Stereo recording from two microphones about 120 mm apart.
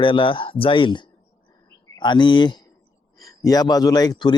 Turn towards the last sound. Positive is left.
turn(degrees=35)  # may be behind; listen again after turning